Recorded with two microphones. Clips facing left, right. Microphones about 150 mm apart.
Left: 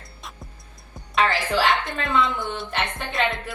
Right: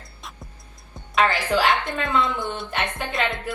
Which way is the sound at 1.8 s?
20° right (ahead or behind).